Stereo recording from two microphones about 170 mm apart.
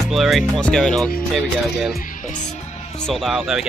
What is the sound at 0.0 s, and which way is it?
Speech, centre (ahead or behind).